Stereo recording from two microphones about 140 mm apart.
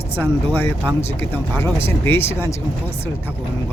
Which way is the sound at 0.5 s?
15° left (ahead or behind).